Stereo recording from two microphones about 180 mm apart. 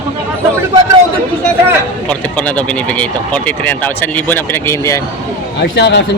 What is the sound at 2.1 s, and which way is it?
Speech, 10° left (ahead or behind).